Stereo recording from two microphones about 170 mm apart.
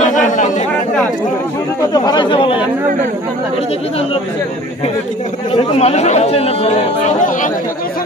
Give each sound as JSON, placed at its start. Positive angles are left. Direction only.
{"t": 0.0, "sound": "chatter", "side_deg": 45}
{"t": 2.0, "sound": "speech", "side_deg": 30}
{"t": 5.5, "sound": "speech", "side_deg": 40}